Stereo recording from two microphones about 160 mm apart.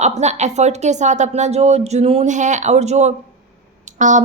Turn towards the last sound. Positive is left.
turn(degrees=-50)  # may be behind; listen again after turning